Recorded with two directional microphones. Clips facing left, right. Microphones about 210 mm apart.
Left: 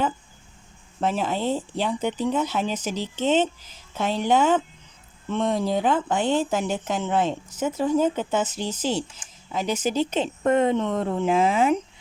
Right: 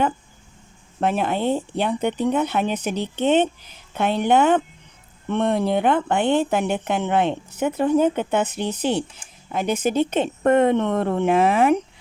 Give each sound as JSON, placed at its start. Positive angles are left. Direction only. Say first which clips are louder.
{"t": 1.0, "sound": "speech", "louder": "right 3 dB", "side_deg": -60}